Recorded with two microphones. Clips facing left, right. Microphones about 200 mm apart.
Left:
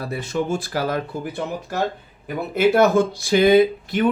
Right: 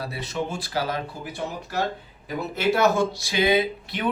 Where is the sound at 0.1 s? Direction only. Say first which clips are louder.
Left 6 dB; 50° left (ahead or behind).